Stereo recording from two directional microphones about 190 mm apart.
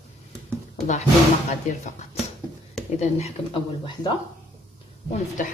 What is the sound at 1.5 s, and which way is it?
Speech, 40° left (ahead or behind).